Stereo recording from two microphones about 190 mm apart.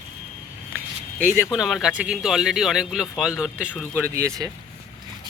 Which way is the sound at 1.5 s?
Centre (ahead or behind).